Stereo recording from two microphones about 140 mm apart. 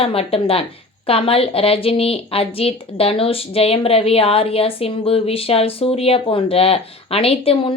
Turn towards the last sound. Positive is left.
turn(degrees=45)  # may be behind; listen again after turning